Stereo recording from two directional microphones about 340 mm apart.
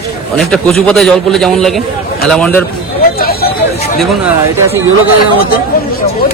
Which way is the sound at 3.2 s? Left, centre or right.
Left.